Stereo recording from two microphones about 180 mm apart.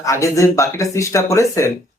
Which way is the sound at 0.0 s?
15° left (ahead or behind).